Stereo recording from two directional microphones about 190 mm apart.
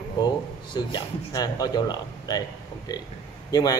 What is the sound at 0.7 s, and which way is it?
Speech, 25° left (ahead or behind).